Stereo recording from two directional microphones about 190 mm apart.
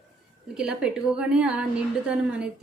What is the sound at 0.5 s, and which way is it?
A woman's voice, 5° right (ahead or behind).